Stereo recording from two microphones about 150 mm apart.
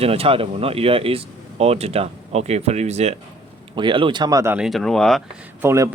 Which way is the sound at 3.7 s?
35° right (ahead or behind).